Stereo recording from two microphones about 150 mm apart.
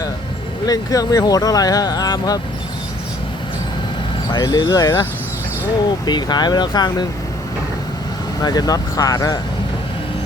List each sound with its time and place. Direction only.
0.7 s speech: 25° left (ahead or behind)
4.3 s speech: 30° left (ahead or behind)
6.1 s speech: 30° left (ahead or behind)
8.4 s speech: 25° left (ahead or behind)